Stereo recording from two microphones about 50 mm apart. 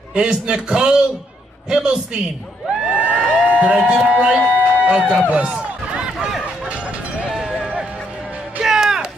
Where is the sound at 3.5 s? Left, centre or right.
Right.